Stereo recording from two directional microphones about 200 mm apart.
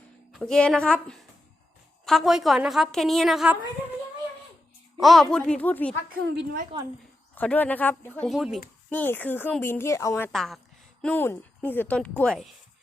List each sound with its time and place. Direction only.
0.3 s a woman's voice: 5° left (ahead or behind)
4.9 s a woman's voice: centre (ahead or behind)
6.2 s a woman's voice: 55° right (ahead or behind)
7.3 s a woman's voice: 10° left (ahead or behind)
10.3 s a woman's voice: centre (ahead or behind)